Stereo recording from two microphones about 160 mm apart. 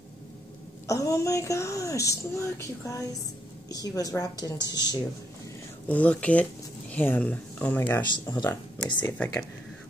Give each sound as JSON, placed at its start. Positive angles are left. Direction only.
{"t": 0.8, "sound": "a woman's voice", "side_deg": 20}
{"t": 5.9, "sound": "speech", "side_deg": 10}
{"t": 8.4, "sound": "a woman's voice", "side_deg": 25}